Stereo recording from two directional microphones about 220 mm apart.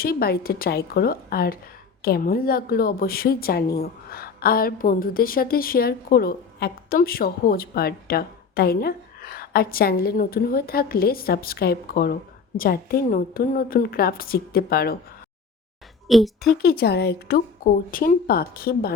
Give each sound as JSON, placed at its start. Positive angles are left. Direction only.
{"t": 0.0, "sound": "a woman's voice", "side_deg": 45}
{"t": 16.0, "sound": "a woman's voice", "side_deg": 0}
{"t": 16.6, "sound": "a woman's voice", "side_deg": 45}